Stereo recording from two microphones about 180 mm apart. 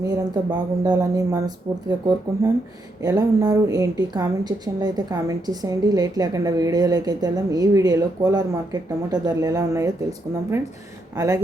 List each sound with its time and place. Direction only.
0.1 s a woman's voice: 20° right (ahead or behind)